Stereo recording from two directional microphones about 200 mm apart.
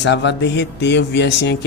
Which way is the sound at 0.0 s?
65° left (ahead or behind).